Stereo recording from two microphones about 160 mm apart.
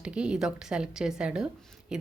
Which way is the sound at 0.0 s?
5° right (ahead or behind).